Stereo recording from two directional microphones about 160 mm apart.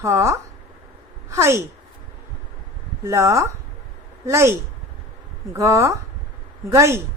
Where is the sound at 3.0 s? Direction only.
20° right (ahead or behind).